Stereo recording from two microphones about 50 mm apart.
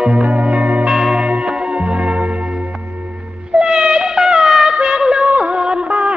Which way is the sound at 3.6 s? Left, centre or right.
Centre.